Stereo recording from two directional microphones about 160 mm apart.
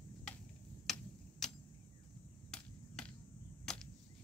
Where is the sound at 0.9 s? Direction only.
5° left (ahead or behind).